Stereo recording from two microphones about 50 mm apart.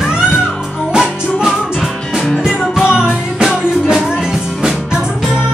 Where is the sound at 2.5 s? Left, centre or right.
Centre.